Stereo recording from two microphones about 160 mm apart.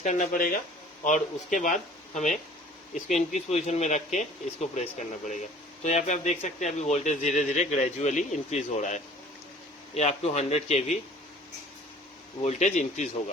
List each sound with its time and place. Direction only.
0.0 s speech: 50° left (ahead or behind)
12.4 s speech: 45° left (ahead or behind)